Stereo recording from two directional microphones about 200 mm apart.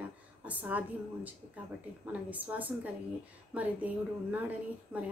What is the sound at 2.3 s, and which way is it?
A woman's voice, 10° right (ahead or behind).